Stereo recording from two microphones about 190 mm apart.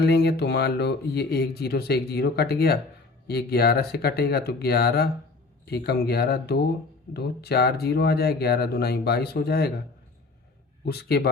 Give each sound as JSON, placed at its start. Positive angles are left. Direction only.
{"t": 0.0, "sound": "speech", "side_deg": 60}
{"t": 10.8, "sound": "speech", "side_deg": 55}